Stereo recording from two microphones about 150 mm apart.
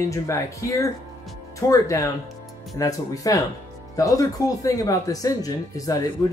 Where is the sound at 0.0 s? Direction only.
20° left (ahead or behind).